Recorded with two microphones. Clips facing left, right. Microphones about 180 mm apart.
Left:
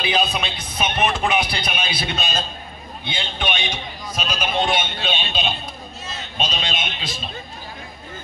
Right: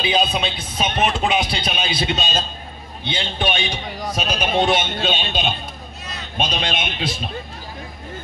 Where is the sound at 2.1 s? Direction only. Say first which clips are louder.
Right 2 dB; 30° right (ahead or behind).